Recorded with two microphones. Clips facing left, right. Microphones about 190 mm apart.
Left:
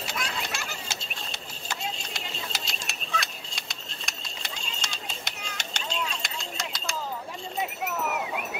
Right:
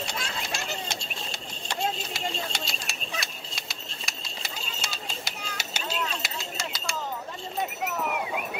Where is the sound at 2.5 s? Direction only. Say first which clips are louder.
Right 2 dB; centre (ahead or behind).